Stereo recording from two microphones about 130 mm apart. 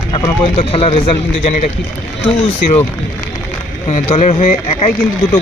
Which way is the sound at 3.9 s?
60° left (ahead or behind).